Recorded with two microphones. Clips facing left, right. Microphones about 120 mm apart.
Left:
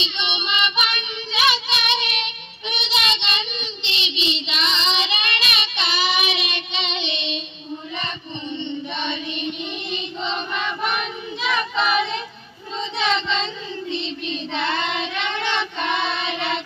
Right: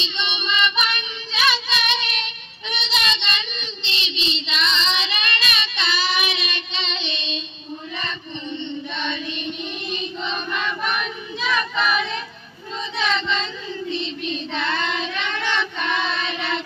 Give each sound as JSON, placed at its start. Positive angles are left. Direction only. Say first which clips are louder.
{"t": 0.0, "sound": "child singing", "louder": "even", "side_deg": 20}
{"t": 8.5, "sound": "chant", "louder": "left 2 dB", "side_deg": 20}
{"t": 12.9, "sound": "child singing", "louder": "left 1 dB", "side_deg": 25}